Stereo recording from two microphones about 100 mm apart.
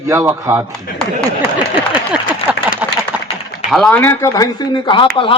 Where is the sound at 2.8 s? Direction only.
15° right (ahead or behind).